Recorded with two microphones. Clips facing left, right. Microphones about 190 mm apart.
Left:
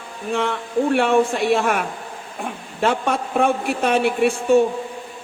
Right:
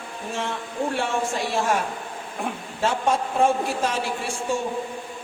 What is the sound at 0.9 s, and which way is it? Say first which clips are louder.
Speech: left 10 dB; 60° left (ahead or behind).